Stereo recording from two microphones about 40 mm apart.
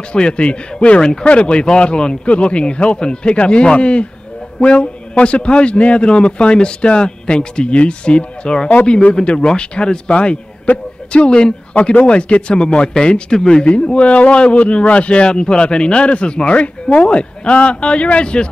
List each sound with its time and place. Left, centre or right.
0.1 s speech: left
10.7 s a man's voice: left
11.1 s speech: left
11.9 s speech: left